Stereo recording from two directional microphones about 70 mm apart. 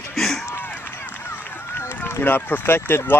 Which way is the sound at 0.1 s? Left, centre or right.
Centre.